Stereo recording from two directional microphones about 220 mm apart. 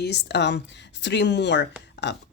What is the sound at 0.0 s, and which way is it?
Speech, 50° left (ahead or behind).